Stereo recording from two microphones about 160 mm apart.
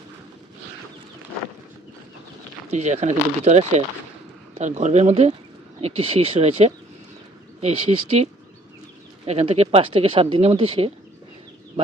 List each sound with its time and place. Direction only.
2.6 s speech: 45° right (ahead or behind)